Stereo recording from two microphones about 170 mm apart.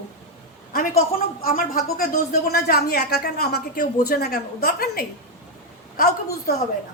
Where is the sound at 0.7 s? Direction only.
55° left (ahead or behind).